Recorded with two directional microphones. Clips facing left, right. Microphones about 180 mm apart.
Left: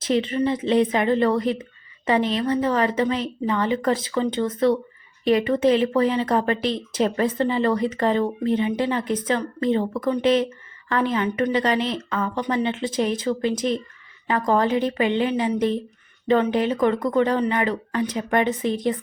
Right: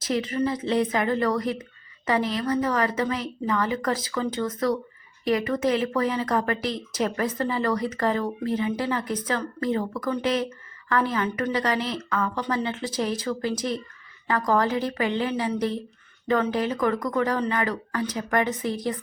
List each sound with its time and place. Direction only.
0.0 s speech: 25° left (ahead or behind)